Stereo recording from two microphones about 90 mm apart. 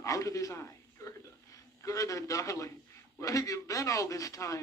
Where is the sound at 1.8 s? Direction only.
35° left (ahead or behind).